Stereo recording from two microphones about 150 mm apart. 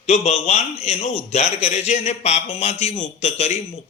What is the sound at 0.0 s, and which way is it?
A man's voice, 45° left (ahead or behind).